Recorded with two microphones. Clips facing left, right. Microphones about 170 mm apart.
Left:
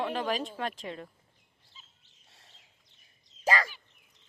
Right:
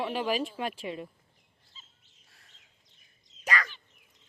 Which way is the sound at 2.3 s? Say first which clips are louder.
Left 3 dB; 25° left (ahead or behind).